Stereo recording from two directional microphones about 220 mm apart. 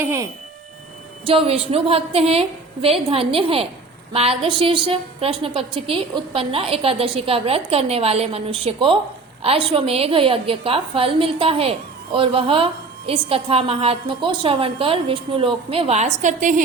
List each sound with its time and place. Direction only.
0.0 s speech: 10° right (ahead or behind)
1.2 s a woman's voice: 25° right (ahead or behind)